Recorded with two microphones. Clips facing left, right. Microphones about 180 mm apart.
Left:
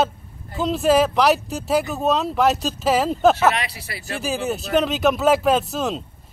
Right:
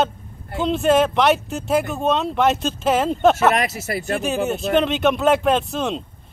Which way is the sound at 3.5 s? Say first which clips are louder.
Right 7 dB; 45° right (ahead or behind).